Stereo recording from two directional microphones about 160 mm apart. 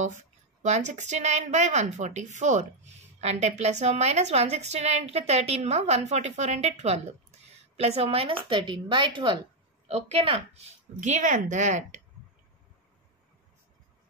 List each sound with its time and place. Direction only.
0.2 s a woman's voice: 45° right (ahead or behind); by 9.4 s 30° right (ahead or behind)
9.8 s a woman's voice: 45° right (ahead or behind)